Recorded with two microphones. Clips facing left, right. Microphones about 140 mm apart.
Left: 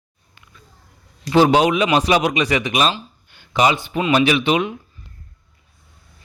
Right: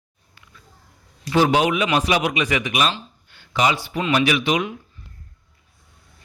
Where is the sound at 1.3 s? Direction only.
30° left (ahead or behind).